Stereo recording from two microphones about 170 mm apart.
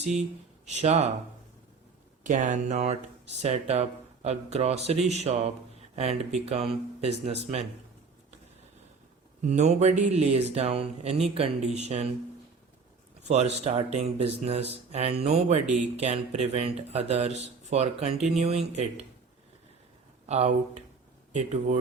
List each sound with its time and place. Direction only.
0.0 s speech: 40° right (ahead or behind)
2.2 s speech: 45° right (ahead or behind)
9.4 s speech: 45° right (ahead or behind)
13.2 s speech: 40° right (ahead or behind)
20.2 s speech: 40° right (ahead or behind)